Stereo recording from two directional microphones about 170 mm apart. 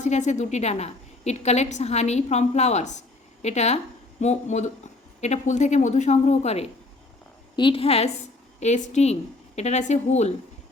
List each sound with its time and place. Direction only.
0.0 s a woman's voice: 45° left (ahead or behind)